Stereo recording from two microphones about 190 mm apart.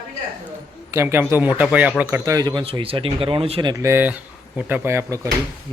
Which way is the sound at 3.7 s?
15° right (ahead or behind).